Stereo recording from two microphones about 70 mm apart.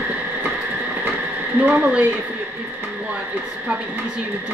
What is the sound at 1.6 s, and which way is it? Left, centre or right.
Speech, right.